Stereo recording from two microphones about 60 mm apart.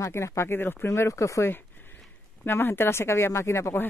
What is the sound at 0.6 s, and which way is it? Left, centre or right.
Speech, left.